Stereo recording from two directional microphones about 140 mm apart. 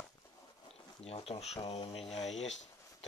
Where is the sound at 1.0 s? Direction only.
45° left (ahead or behind).